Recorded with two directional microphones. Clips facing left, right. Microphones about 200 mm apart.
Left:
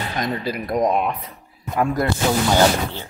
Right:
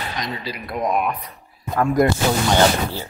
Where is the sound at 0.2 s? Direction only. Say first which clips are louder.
Left 5 dB; 55° left (ahead or behind); by 1.3 s 25° left (ahead or behind).